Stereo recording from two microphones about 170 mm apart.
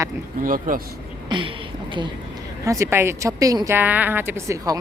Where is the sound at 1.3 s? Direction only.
25° right (ahead or behind).